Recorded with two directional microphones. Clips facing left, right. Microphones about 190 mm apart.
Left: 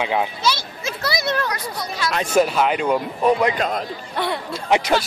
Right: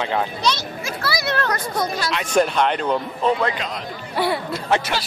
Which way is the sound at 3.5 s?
50° left (ahead or behind).